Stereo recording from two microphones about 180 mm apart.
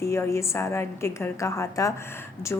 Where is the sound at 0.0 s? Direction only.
15° left (ahead or behind).